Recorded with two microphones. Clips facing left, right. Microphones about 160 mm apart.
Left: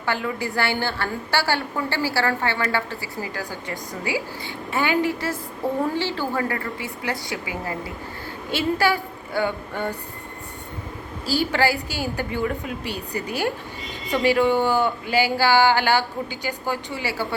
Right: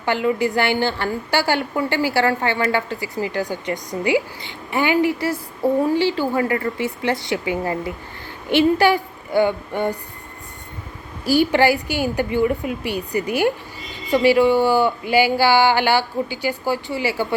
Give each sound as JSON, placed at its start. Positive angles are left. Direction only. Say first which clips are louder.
{"t": 0.0, "sound": "a woman's voice", "louder": "right 7 dB", "side_deg": -20}
{"t": 8.5, "sound": "speech", "louder": "right 6 dB", "side_deg": -15}
{"t": 11.3, "sound": "a woman's voice", "louder": "right 6 dB", "side_deg": -15}